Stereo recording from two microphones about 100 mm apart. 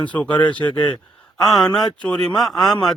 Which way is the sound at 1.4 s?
Centre (ahead or behind).